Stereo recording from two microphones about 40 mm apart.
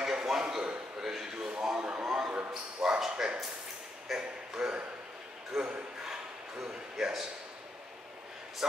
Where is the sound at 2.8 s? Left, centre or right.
Centre.